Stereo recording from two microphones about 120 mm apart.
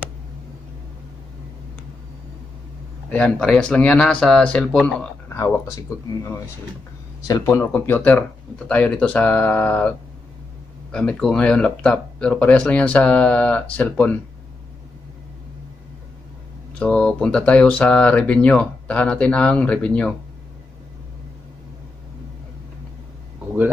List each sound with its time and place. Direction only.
3.1 s speech: 10° left (ahead or behind)
5.3 s speech: 25° left (ahead or behind)
7.4 s speech: 20° left (ahead or behind)
16.7 s speech: 10° left (ahead or behind)